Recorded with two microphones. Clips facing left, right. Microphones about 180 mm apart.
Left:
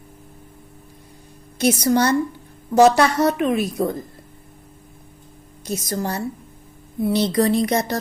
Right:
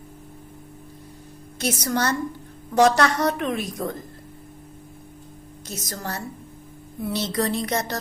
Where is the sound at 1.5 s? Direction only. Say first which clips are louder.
Left 7 dB; 15° left (ahead or behind).